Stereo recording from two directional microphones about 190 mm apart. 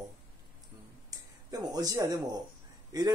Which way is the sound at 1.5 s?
20° right (ahead or behind).